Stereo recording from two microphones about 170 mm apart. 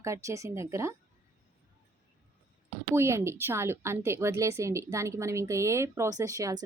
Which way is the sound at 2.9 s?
15° right (ahead or behind).